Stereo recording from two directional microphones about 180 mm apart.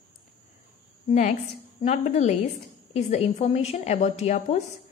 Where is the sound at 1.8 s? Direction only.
40° left (ahead or behind).